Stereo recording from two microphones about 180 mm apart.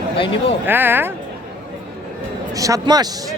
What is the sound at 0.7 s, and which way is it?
Speech, 10° right (ahead or behind).